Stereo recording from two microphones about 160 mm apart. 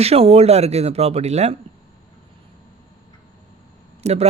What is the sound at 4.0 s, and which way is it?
Speech, 40° right (ahead or behind).